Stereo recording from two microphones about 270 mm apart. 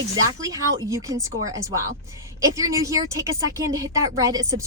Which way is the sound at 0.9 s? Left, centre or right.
Centre.